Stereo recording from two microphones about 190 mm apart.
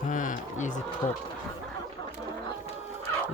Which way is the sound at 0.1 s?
40° left (ahead or behind).